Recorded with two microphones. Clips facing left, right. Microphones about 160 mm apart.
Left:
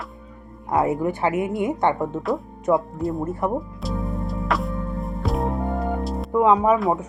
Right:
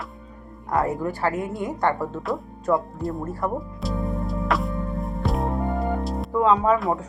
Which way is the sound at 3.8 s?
Centre (ahead or behind).